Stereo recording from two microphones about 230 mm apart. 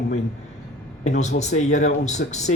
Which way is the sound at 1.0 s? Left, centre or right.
Left.